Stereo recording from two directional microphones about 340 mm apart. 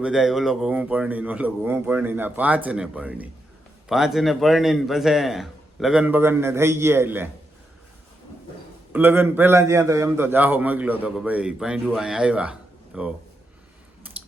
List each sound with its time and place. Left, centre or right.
0.0 s a man's voice: centre
8.9 s a man's voice: centre